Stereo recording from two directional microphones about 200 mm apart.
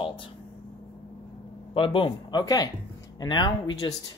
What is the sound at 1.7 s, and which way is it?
Speech, 25° left (ahead or behind).